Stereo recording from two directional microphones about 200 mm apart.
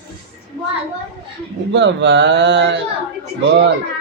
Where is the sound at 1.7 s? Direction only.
65° right (ahead or behind).